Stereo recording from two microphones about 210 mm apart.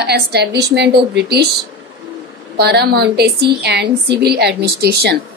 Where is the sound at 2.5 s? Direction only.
50° right (ahead or behind).